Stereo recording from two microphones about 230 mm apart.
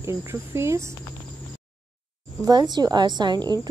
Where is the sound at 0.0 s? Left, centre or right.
Centre.